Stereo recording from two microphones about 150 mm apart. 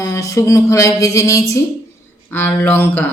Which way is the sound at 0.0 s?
20° left (ahead or behind).